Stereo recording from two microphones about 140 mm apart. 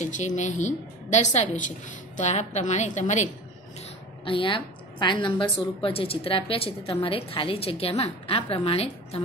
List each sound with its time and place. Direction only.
0.0 s a woman's voice: 60° left (ahead or behind)
4.2 s a woman's voice: 35° left (ahead or behind)